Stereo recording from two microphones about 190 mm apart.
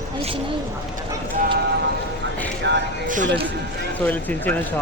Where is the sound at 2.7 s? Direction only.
70° right (ahead or behind).